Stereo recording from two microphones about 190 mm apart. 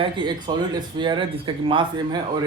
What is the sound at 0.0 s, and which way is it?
A man's voice, 25° right (ahead or behind).